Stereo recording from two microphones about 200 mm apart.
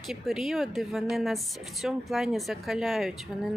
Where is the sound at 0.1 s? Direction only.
Centre (ahead or behind).